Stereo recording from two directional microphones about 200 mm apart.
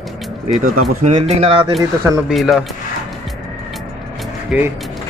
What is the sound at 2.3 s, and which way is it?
Speech, centre (ahead or behind).